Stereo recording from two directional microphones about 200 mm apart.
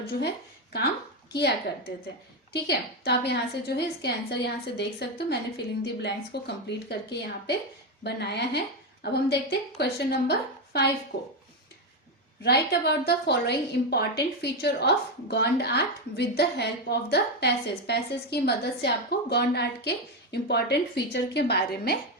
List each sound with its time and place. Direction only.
1.3 s a woman's voice: 55° left (ahead or behind)
12.4 s a woman's voice: 55° left (ahead or behind)